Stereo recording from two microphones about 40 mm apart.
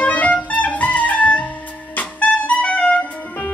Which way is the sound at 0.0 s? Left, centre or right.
Left.